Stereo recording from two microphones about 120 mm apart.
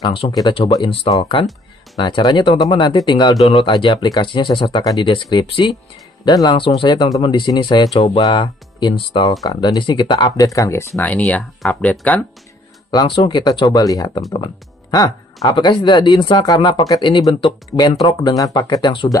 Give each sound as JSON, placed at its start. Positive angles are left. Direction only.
{"t": 0.0, "sound": "speech", "side_deg": 40}
{"t": 0.8, "sound": "speech", "side_deg": 50}
{"t": 2.0, "sound": "speech", "side_deg": 40}
{"t": 6.2, "sound": "speech", "side_deg": 30}
{"t": 6.5, "sound": "speech", "side_deg": 45}
{"t": 7.9, "sound": "speech", "side_deg": 50}
{"t": 9.4, "sound": "speech", "side_deg": 30}
{"t": 10.4, "sound": "speech", "side_deg": 30}
{"t": 11.0, "sound": "speech", "side_deg": 10}
{"t": 12.9, "sound": "speech", "side_deg": 45}
{"t": 18.0, "sound": "speech", "side_deg": 35}